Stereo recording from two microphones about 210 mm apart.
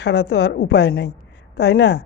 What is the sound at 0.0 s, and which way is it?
A woman's voice, 50° left (ahead or behind).